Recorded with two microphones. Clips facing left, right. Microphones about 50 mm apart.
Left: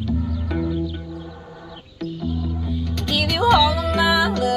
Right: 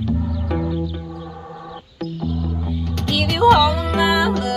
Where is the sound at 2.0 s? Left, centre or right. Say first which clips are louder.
Right 1 dB; right.